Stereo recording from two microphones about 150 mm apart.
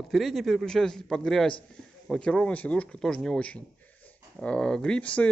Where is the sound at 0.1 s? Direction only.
Centre (ahead or behind).